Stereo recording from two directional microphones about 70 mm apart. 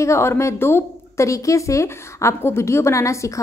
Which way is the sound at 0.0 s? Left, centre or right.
Left.